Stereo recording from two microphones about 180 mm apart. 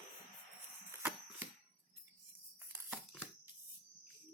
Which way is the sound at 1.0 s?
10° right (ahead or behind).